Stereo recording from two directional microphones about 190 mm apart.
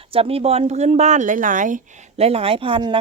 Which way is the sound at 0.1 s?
30° right (ahead or behind).